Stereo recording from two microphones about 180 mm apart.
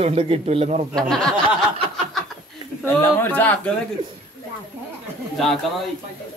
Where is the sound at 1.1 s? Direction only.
5° left (ahead or behind).